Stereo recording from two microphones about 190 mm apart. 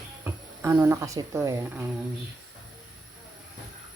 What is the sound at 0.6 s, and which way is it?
Speech, 15° right (ahead or behind).